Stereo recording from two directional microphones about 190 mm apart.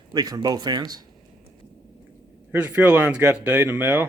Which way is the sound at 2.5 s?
5° right (ahead or behind).